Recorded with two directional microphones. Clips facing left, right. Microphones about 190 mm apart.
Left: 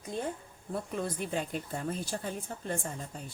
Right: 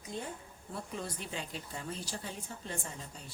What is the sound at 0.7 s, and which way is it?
A woman's voice, 55° left (ahead or behind).